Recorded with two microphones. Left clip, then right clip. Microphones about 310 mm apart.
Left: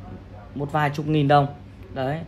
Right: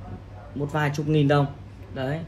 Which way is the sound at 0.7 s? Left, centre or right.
Left.